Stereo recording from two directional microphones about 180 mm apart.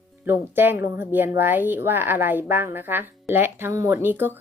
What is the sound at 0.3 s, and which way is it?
Speech, 10° right (ahead or behind).